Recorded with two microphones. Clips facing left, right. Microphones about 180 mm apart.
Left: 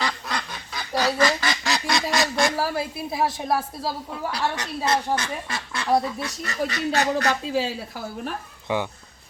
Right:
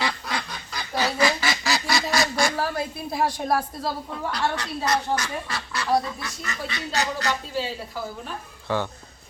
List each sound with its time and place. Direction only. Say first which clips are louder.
0.0 s duck: even; 5° right (ahead or behind)
4.5 s speech: left 1 dB; 25° left (ahead or behind)
6.4 s speech: left 7 dB; 40° left (ahead or behind); by 7.7 s 65° left (ahead or behind)
8.6 s speech: even; 15° left (ahead or behind)